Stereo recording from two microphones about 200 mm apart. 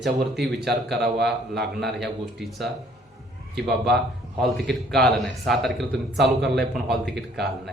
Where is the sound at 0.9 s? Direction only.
55° right (ahead or behind).